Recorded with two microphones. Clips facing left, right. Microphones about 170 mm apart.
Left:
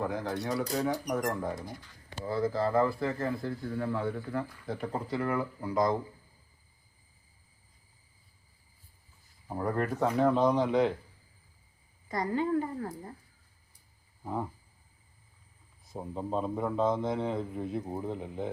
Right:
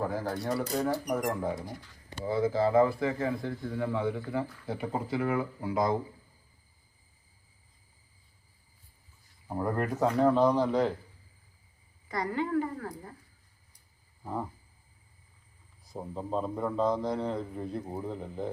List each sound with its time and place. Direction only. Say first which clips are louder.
0.0 s a man's voice: right 1 dB; centre (ahead or behind)
5.4 s speech: right 1 dB; 20° right (ahead or behind)
5.7 s a man's voice: even; 5° right (ahead or behind)
9.5 s a man's voice: even; 5° right (ahead or behind)
12.0 s a woman's voice: left 2 dB; 20° left (ahead or behind)
15.8 s a man's voice: left 1 dB; centre (ahead or behind)